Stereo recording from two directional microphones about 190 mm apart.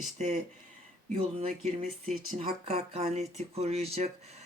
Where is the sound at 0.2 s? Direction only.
35° right (ahead or behind).